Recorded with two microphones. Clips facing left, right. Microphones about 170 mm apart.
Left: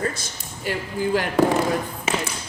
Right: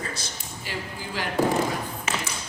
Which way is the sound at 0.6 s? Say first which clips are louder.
Left 11 dB; 55° left (ahead or behind).